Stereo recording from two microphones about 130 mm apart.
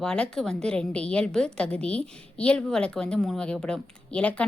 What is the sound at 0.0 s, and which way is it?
A woman's voice, 5° left (ahead or behind).